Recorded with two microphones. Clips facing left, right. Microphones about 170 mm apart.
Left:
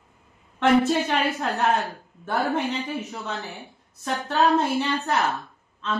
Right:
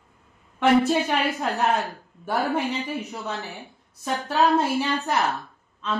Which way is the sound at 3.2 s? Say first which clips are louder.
Right 1 dB; centre (ahead or behind).